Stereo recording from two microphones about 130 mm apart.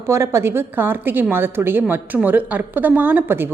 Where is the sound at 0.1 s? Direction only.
20° right (ahead or behind).